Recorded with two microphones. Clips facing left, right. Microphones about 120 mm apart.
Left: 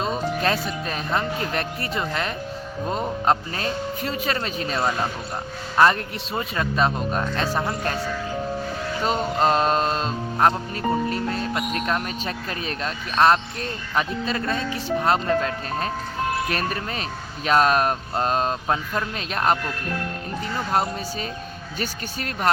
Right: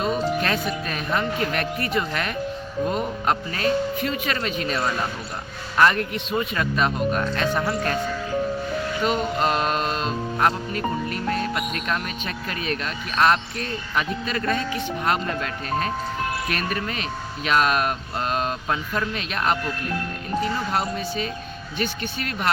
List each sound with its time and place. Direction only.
0.0 s speech: 30° left (ahead or behind)
9.0 s speech: 35° left (ahead or behind)
20.7 s speech: 40° left (ahead or behind)